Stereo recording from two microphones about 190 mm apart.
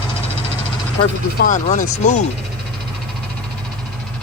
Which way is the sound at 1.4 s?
40° left (ahead or behind).